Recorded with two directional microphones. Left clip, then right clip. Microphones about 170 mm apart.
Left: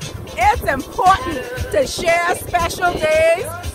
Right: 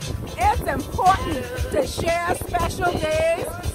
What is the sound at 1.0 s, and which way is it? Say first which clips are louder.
Speech: left 4 dB; 10° left (ahead or behind).